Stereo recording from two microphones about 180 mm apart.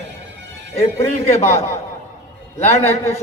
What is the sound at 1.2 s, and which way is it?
Speech, 35° left (ahead or behind).